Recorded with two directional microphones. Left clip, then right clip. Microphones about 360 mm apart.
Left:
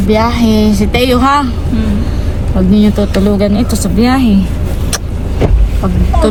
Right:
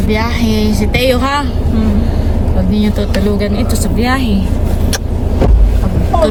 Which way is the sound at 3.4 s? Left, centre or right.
Centre.